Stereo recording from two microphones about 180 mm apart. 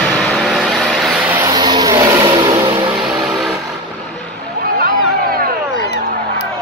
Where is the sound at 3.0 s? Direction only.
Centre (ahead or behind).